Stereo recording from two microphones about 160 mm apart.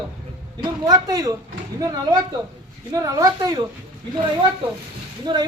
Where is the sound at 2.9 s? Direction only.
20° right (ahead or behind).